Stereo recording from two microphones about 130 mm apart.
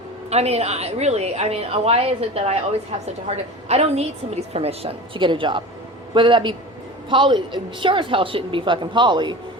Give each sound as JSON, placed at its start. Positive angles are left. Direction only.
{"t": 0.3, "sound": "a woman's voice", "side_deg": -55}